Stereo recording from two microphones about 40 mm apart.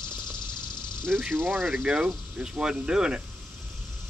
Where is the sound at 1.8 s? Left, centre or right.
Right.